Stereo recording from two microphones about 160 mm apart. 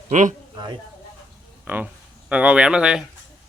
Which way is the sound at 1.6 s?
10° right (ahead or behind).